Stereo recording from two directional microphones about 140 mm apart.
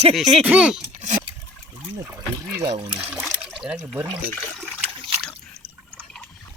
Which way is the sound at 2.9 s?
10° right (ahead or behind).